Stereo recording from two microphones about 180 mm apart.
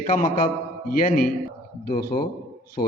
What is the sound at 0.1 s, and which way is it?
A man's voice, 50° left (ahead or behind).